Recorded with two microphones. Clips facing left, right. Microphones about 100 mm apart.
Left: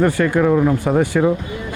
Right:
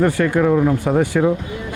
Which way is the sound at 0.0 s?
25° left (ahead or behind).